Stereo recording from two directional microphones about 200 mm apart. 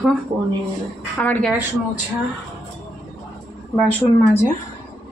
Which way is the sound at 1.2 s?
5° left (ahead or behind).